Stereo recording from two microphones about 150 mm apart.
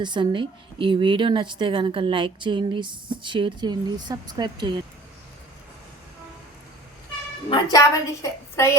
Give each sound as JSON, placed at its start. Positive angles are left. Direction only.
{"t": 0.0, "sound": "a woman's voice", "side_deg": -30}
{"t": 7.5, "sound": "a woman's voice", "side_deg": 20}